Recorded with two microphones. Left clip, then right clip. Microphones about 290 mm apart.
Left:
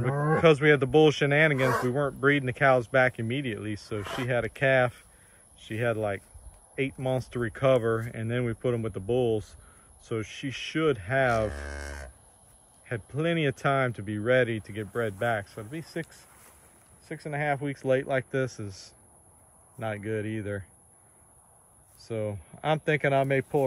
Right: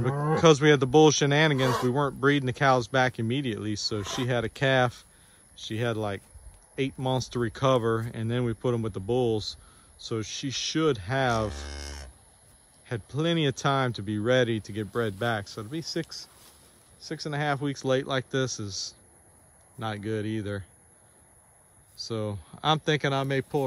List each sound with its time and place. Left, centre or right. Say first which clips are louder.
0.0 s speech: even; centre
17.1 s speech: even; right
17.6 s speech: left 1 dB; centre
20.1 s speech: right 2 dB; centre
22.0 s speech: even; centre